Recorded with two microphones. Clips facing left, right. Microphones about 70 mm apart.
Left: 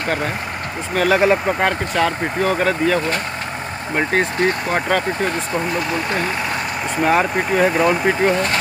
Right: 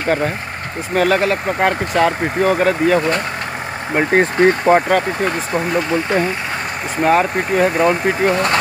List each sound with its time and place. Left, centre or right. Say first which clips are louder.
0.9 s speech: right 2 dB; centre
1.6 s speech: right 3 dB; centre
3.9 s speech: right 4 dB; right
4.7 s speech: right 4 dB; centre
7.0 s speech: right 2 dB; centre